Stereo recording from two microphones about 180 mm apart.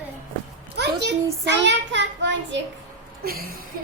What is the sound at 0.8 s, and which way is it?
A child's voice, 75° right (ahead or behind).